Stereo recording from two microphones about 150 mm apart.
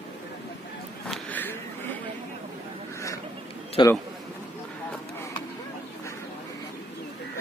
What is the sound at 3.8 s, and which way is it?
Speech, 35° left (ahead or behind).